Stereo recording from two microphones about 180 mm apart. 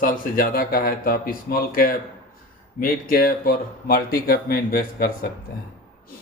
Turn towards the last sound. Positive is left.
turn(degrees=55)  # may be behind; listen again after turning